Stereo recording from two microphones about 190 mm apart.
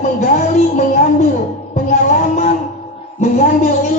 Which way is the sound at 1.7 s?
40° left (ahead or behind).